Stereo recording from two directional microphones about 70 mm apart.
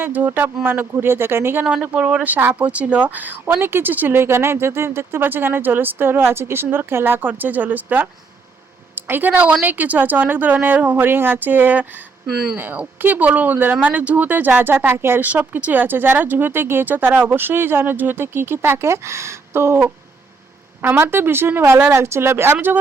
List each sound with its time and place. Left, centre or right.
0.0 s speech: right
1.6 s a woman's voice: centre
12.2 s speech: centre
12.5 s speech: right
15.3 s speech: right